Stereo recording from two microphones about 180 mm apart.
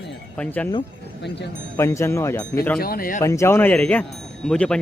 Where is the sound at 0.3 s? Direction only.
10° left (ahead or behind).